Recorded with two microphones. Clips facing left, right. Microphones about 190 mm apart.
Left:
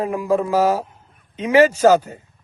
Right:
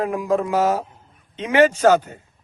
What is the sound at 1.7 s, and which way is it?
Speech, 35° left (ahead or behind).